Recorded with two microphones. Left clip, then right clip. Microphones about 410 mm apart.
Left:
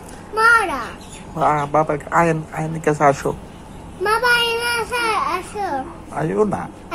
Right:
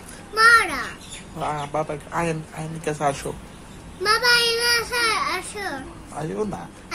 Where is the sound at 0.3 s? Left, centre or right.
Centre.